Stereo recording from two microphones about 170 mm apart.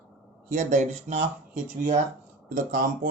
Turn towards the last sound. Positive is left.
turn(degrees=-55)  # may be behind; listen again after turning